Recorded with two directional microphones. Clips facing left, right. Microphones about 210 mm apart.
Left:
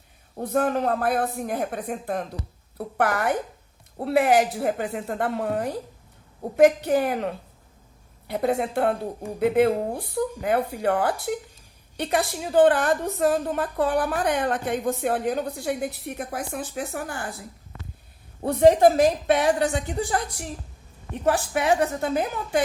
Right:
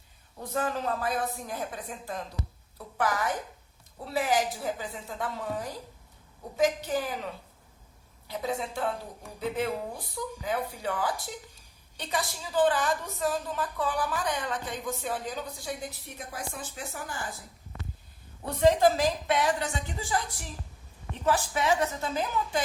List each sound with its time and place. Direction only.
0.3 s a woman's voice: 60° left (ahead or behind)
18.4 s a woman's voice: 60° left (ahead or behind)